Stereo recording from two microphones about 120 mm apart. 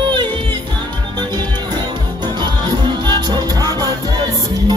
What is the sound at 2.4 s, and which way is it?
Music, 40° right (ahead or behind).